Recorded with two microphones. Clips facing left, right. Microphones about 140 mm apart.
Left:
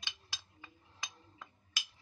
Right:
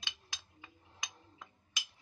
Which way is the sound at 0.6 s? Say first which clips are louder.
Right 1 dB; 15° right (ahead or behind).